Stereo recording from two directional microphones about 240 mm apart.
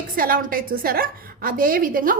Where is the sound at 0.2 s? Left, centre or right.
Right.